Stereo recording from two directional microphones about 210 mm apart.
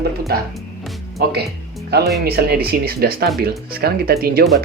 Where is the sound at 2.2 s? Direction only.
50° right (ahead or behind).